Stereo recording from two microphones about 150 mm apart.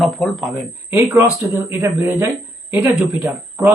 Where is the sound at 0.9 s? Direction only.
20° right (ahead or behind).